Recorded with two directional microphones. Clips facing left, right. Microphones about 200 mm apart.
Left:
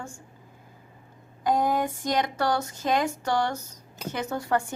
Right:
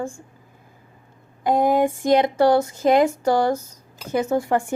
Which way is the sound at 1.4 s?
25° right (ahead or behind).